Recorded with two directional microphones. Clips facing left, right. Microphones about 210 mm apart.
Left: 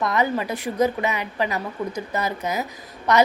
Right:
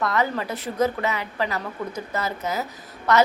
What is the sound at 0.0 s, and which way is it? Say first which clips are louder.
A woman's voice: left 2 dB; 15° left (ahead or behind).